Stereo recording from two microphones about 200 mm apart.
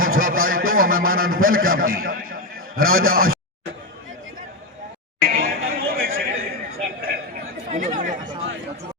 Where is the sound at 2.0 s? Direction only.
45° right (ahead or behind).